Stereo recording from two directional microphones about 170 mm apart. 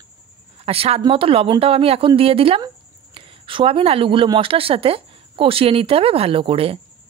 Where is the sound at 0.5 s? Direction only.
35° right (ahead or behind).